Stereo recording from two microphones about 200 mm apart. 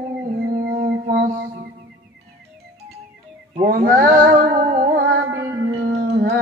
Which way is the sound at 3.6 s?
45° right (ahead or behind).